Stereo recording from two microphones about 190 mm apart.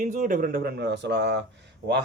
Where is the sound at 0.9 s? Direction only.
65° right (ahead or behind).